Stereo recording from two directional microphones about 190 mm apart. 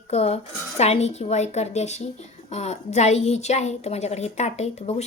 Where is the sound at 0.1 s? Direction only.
35° left (ahead or behind).